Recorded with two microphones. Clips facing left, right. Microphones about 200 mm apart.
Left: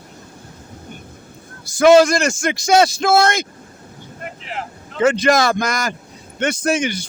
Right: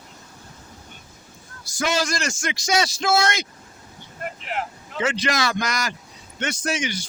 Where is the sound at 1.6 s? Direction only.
55° left (ahead or behind).